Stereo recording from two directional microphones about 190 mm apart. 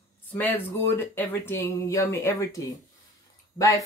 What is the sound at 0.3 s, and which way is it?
Speech, 10° left (ahead or behind).